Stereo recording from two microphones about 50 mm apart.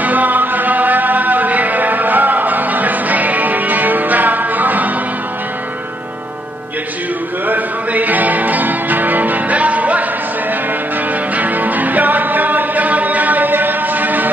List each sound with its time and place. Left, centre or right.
0.0 s music: right
7.4 s music: right
11.3 s music: right